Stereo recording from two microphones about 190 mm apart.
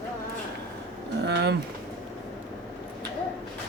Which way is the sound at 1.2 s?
60° right (ahead or behind).